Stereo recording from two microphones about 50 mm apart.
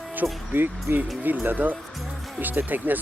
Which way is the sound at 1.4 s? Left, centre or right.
Right.